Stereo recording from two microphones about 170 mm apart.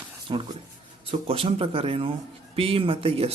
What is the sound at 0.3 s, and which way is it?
Speech, 30° right (ahead or behind).